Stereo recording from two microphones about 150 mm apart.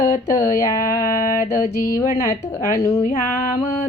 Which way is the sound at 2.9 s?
45° left (ahead or behind).